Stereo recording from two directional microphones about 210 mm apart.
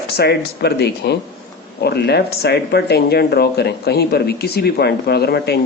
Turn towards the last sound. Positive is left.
turn(degrees=50)  # may be behind; listen again after turning